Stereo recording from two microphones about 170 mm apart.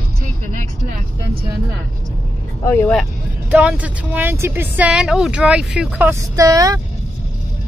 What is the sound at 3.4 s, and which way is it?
A woman's voice, 5° right (ahead or behind).